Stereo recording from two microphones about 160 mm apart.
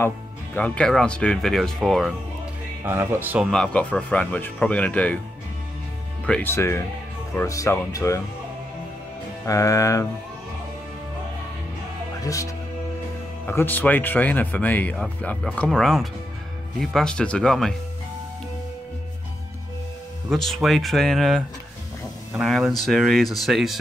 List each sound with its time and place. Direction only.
0.6 s speech: 10° left (ahead or behind)
2.8 s speech: 15° right (ahead or behind); by 5.2 s 10° left (ahead or behind)
6.2 s speech: 10° left (ahead or behind)
9.5 s speech: 20° left (ahead or behind)
12.2 s speech: 20° left (ahead or behind)
13.5 s speech: 15° left (ahead or behind)
20.2 s speech: centre (ahead or behind)